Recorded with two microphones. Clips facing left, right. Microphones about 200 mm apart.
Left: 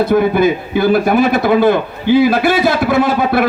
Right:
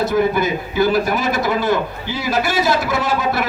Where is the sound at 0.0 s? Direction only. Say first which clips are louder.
Left 5 dB; 55° left (ahead or behind).